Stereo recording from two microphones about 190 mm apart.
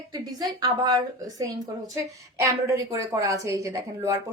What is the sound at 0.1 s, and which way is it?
A woman's voice, 20° right (ahead or behind).